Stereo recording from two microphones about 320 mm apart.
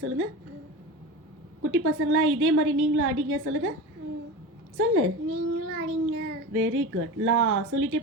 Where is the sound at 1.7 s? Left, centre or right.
Right.